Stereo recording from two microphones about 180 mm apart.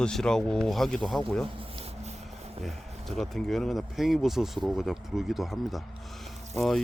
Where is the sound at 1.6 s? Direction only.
30° right (ahead or behind).